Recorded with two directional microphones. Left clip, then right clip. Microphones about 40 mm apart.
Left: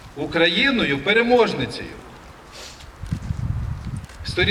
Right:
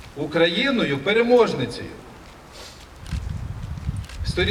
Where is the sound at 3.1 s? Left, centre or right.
Right.